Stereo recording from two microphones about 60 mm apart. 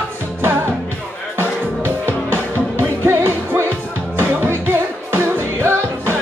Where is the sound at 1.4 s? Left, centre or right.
Right.